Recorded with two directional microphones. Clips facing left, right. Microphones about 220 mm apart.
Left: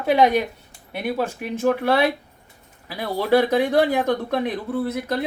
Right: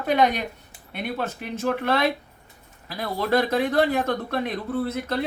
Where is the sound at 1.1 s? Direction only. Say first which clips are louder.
Left 4 dB; 10° left (ahead or behind).